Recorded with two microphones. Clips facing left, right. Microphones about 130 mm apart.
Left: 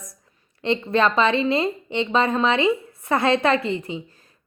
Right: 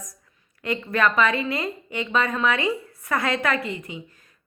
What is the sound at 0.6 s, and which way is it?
A woman's voice, 25° left (ahead or behind).